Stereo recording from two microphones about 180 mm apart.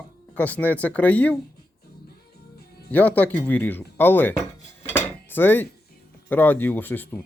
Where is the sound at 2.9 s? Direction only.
10° left (ahead or behind).